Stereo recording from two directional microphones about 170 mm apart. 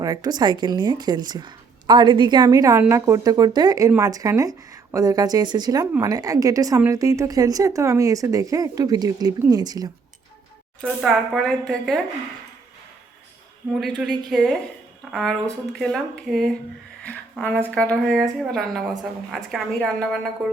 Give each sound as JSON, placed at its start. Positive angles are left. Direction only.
{"t": 0.0, "sound": "a woman's voice", "side_deg": -20}
{"t": 10.8, "sound": "speech", "side_deg": 0}
{"t": 13.7, "sound": "speech", "side_deg": 0}
{"t": 17.0, "sound": "a sound", "side_deg": 10}
{"t": 17.7, "sound": "speech", "side_deg": 5}